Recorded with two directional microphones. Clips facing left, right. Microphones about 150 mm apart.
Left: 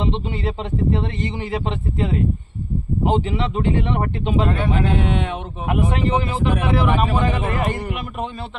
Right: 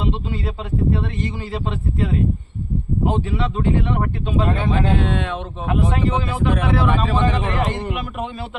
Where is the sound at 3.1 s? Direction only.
20° left (ahead or behind).